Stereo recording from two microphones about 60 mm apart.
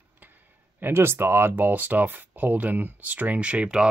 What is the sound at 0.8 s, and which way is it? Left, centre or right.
Speech, right.